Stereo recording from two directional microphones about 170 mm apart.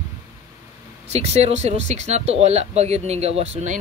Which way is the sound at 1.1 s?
40° right (ahead or behind).